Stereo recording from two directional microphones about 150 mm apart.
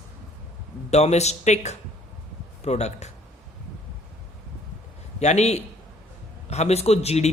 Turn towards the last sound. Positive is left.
turn(degrees=45)  # may be behind; listen again after turning